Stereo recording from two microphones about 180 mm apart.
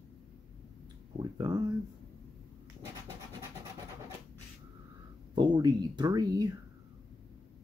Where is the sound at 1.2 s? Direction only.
20° right (ahead or behind).